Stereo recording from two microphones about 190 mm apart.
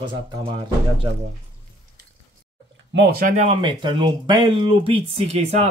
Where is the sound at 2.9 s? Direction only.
55° right (ahead or behind).